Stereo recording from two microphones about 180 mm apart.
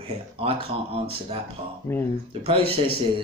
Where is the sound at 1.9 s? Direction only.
15° left (ahead or behind).